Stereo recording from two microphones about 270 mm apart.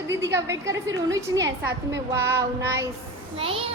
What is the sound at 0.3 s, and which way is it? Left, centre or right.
Child singing, centre.